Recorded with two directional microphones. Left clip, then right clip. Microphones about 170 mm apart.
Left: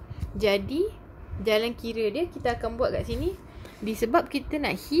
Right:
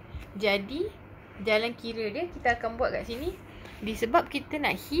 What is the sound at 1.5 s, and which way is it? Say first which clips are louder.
Speech: left 2 dB; 70° left (ahead or behind).